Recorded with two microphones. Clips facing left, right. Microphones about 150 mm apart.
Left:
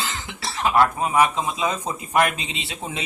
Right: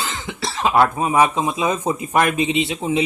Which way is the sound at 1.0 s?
25° right (ahead or behind).